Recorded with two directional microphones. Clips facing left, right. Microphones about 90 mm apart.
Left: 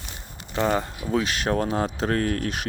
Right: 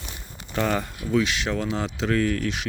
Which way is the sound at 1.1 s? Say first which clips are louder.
Right 1 dB; 40° left (ahead or behind).